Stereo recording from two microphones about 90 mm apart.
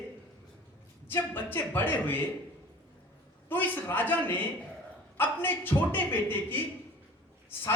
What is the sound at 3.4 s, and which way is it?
Speech, 20° left (ahead or behind).